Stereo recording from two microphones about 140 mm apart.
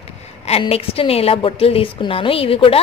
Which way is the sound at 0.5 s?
45° left (ahead or behind).